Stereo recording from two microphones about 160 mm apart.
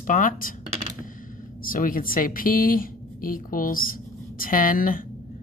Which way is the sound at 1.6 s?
60° left (ahead or behind).